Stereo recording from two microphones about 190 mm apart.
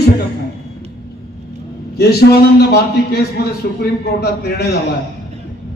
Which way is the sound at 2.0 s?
55° left (ahead or behind).